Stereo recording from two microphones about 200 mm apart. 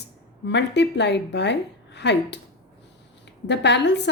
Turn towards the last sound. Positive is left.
turn(degrees=60)  # may be behind; listen again after turning